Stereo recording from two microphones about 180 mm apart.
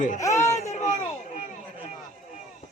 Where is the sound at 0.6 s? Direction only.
40° left (ahead or behind).